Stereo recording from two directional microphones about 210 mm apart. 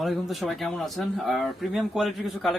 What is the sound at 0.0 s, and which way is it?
Speech, centre (ahead or behind).